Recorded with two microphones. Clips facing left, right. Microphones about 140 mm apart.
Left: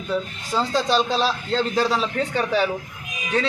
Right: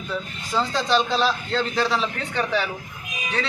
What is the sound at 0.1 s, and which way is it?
Speech, 10° left (ahead or behind).